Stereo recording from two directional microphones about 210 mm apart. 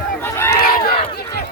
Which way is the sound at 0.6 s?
45° left (ahead or behind).